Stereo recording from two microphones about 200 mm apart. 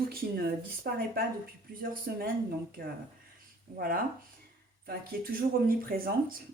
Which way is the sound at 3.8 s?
45° right (ahead or behind).